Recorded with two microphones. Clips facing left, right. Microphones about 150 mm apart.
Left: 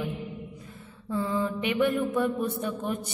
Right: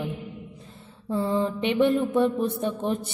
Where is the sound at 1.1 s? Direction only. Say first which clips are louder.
Right 3 dB; 30° right (ahead or behind).